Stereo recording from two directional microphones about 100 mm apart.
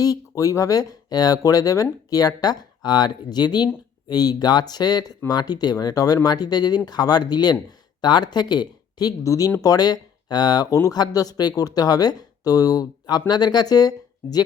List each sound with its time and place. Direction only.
0.0 s speech: 35° left (ahead or behind)